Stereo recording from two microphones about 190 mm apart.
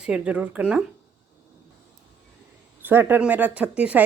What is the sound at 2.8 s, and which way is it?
Speech, 10° right (ahead or behind).